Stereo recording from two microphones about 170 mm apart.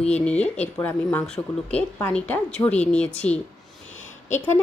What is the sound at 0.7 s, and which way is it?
Speech, 10° left (ahead or behind).